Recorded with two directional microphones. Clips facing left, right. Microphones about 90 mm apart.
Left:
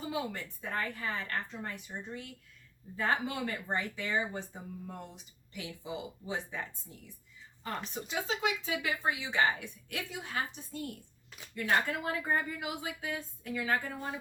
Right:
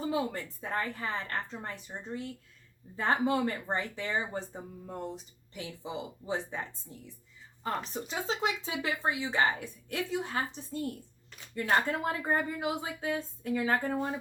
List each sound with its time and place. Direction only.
0.0 s speech: 35° right (ahead or behind)
8.1 s speech: 35° right (ahead or behind)